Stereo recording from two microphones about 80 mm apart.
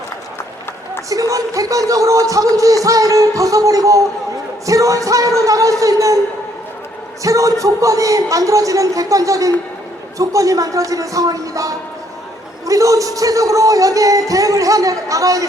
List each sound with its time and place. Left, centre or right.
1.1 s music: right
7.2 s music: right